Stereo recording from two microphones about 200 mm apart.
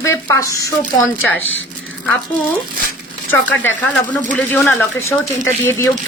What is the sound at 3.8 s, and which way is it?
Speech, 5° left (ahead or behind).